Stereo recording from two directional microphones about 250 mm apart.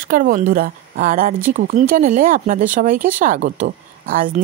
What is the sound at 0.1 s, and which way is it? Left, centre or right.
A woman's voice, right.